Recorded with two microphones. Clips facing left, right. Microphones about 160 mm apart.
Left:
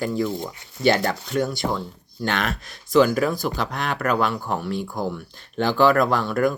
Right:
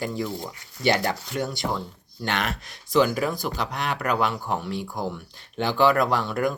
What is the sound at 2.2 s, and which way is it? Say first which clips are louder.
Speech: left 3 dB; 15° right (ahead or behind).